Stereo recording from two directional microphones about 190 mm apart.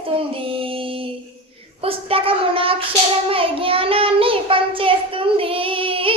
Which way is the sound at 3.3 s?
30° right (ahead or behind).